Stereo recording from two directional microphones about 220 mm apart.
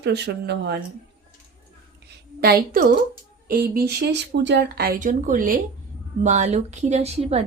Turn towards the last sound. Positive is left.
turn(degrees=-30)  # may be behind; listen again after turning